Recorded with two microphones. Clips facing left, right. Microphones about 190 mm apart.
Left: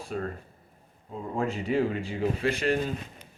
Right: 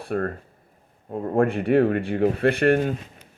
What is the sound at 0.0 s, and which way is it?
Speech, 60° right (ahead or behind).